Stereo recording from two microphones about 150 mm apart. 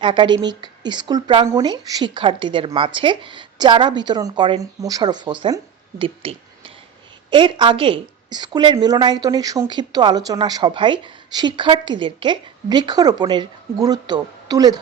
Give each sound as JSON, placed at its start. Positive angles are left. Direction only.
{"t": 0.0, "sound": "a woman's voice", "side_deg": -30}